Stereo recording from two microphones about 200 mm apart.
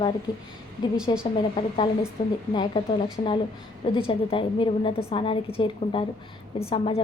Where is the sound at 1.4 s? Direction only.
25° left (ahead or behind).